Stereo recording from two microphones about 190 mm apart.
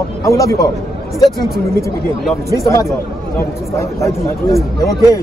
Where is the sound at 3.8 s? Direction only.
15° left (ahead or behind).